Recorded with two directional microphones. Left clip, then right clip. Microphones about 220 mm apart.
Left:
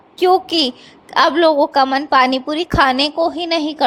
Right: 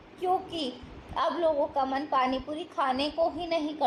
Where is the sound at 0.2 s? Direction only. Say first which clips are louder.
Left 15 dB; 45° left (ahead or behind).